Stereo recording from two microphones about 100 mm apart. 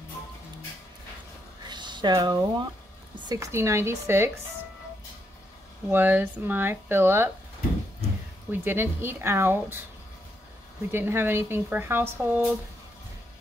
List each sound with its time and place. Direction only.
1.7 s a sound: 50° right (ahead or behind)
2.2 s speech: 50° right (ahead or behind)
3.3 s a woman's voice: 30° right (ahead or behind)
5.9 s a woman's voice: 20° right (ahead or behind)
8.5 s a woman's voice: 20° right (ahead or behind)
10.9 s a woman's voice: 25° right (ahead or behind)